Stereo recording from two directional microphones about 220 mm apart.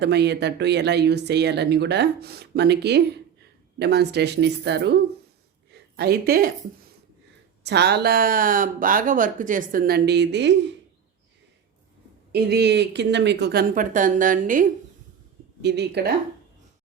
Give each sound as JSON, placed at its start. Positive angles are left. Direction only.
{"t": 0.0, "sound": "speech", "side_deg": -50}
{"t": 6.0, "sound": "speech", "side_deg": -45}
{"t": 7.6, "sound": "speech", "side_deg": -50}
{"t": 12.3, "sound": "speech", "side_deg": -50}
{"t": 15.6, "sound": "speech", "side_deg": -50}